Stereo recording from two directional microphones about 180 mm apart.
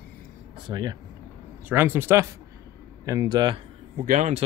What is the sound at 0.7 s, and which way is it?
Speech, 25° right (ahead or behind).